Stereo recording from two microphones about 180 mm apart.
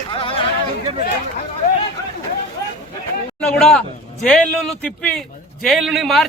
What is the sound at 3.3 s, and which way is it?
A man's voice, 5° left (ahead or behind).